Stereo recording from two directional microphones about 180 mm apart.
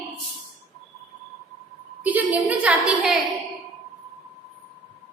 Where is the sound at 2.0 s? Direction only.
10° right (ahead or behind).